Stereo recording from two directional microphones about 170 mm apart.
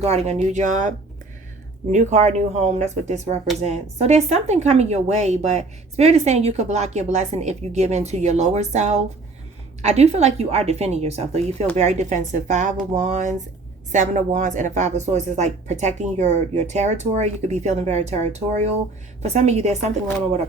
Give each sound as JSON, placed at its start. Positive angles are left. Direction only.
{"t": 0.0, "sound": "a woman's voice", "side_deg": -40}